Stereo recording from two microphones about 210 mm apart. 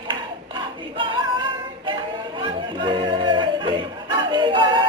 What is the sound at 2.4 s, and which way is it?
Music, 25° right (ahead or behind).